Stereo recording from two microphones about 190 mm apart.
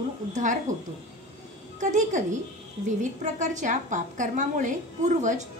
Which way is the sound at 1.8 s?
40° right (ahead or behind).